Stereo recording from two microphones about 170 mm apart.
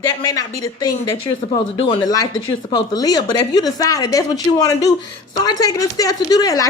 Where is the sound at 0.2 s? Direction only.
20° left (ahead or behind).